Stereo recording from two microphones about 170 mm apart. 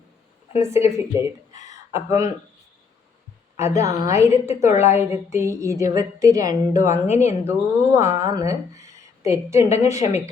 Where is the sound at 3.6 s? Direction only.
20° right (ahead or behind).